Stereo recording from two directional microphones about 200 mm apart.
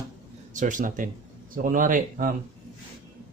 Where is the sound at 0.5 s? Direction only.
40° right (ahead or behind).